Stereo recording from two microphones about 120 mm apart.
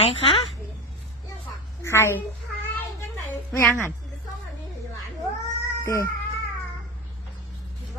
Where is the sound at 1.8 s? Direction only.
20° left (ahead or behind).